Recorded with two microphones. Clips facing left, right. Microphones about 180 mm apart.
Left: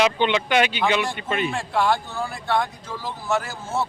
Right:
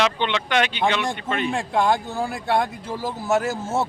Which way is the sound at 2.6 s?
40° right (ahead or behind).